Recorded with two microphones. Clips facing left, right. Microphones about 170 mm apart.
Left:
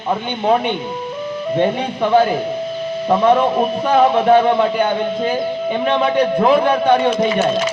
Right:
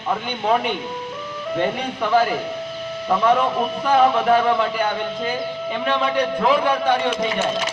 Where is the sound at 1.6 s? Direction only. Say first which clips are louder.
Left 5 dB; 25° left (ahead or behind).